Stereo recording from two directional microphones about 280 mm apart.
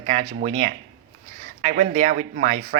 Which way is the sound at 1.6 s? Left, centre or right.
Right.